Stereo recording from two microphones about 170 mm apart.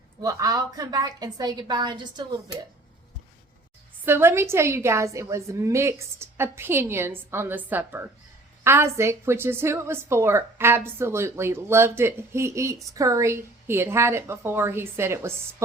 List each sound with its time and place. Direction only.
0.2 s a woman's voice: 20° right (ahead or behind)
4.0 s a woman's voice: 15° right (ahead or behind)